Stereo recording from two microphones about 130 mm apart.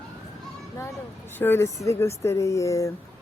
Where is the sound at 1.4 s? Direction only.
20° left (ahead or behind).